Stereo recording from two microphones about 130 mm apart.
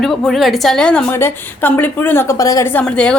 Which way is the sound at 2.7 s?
10° left (ahead or behind).